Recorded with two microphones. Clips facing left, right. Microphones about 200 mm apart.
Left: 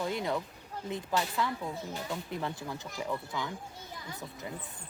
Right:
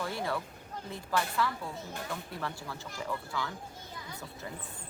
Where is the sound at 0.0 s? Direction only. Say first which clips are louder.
Left 2 dB; 20° left (ahead or behind).